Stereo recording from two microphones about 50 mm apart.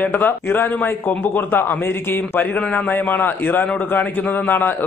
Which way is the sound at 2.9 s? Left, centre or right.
Left.